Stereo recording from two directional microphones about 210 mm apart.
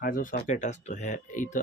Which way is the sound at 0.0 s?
40° left (ahead or behind).